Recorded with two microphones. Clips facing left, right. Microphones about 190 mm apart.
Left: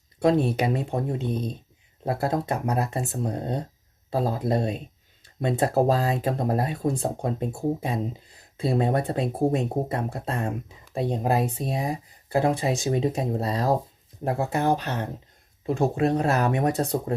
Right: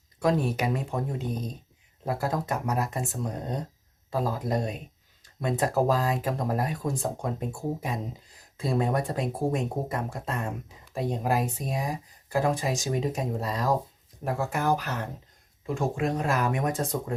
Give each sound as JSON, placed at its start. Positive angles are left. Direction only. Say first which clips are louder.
{"t": 0.2, "sound": "speech", "louder": "left 4 dB", "side_deg": 25}
{"t": 15.6, "sound": "speech", "louder": "left 5 dB", "side_deg": 35}